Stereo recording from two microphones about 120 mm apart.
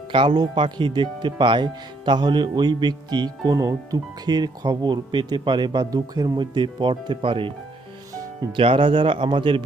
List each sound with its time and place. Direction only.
0.1 s speech: 40° right (ahead or behind)
8.1 s music: 30° right (ahead or behind)
8.5 s speech: 45° right (ahead or behind)